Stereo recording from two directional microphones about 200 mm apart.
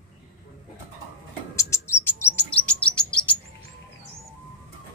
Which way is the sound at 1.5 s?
15° left (ahead or behind).